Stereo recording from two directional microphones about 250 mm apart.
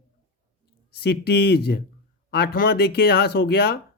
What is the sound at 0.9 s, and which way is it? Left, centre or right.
Speech, left.